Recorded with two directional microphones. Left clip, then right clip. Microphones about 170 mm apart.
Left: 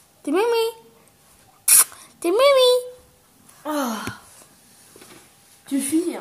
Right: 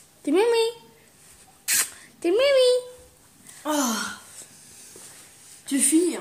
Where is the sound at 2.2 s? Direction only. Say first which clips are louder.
Left 3 dB; 15° left (ahead or behind).